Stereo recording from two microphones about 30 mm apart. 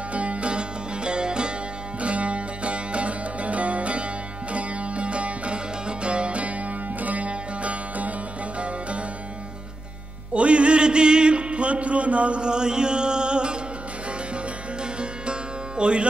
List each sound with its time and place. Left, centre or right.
0.1 s music: right
2.0 s music: right
7.0 s music: right
10.3 s music: right
12.4 s music: right
15.0 s music: right